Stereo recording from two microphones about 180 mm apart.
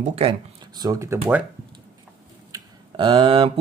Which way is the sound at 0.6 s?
20° right (ahead or behind).